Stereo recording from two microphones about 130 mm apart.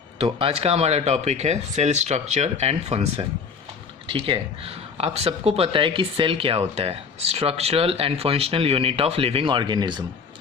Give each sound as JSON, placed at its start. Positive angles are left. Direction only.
{"t": 0.2, "sound": "speech", "side_deg": -45}
{"t": 4.0, "sound": "speech", "side_deg": -40}